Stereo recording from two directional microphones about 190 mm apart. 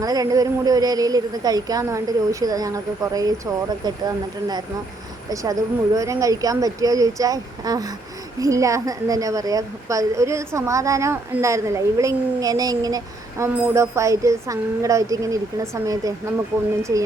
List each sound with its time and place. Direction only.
0.0 s a woman's voice: 20° right (ahead or behind)